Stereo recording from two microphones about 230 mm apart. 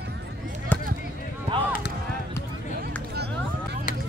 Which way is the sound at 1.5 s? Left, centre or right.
Right.